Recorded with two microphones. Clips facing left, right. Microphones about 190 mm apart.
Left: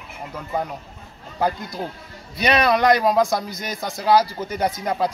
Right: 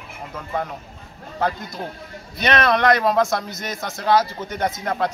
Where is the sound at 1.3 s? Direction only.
15° left (ahead or behind).